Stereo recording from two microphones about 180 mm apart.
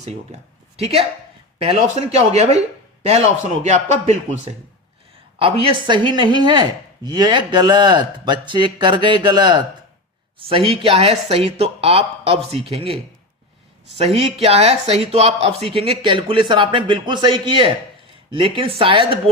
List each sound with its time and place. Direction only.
0.0 s speech: 40° right (ahead or behind)
1.5 s speech: 35° right (ahead or behind)
14.3 s speech: 35° right (ahead or behind)